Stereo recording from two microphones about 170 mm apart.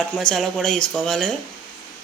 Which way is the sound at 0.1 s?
5° left (ahead or behind).